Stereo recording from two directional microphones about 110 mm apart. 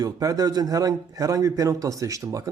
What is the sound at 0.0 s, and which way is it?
Speech, 35° right (ahead or behind).